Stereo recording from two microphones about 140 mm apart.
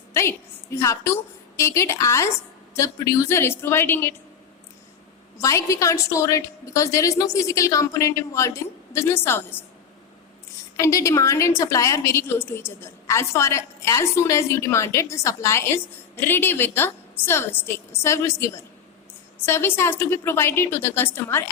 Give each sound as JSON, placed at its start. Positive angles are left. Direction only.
{"t": 0.1, "sound": "a woman's voice", "side_deg": 20}
{"t": 5.4, "sound": "a woman's voice", "side_deg": 20}
{"t": 10.8, "sound": "a woman's voice", "side_deg": 20}